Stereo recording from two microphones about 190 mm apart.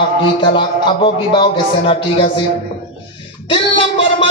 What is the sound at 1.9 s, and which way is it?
Speech, 30° left (ahead or behind).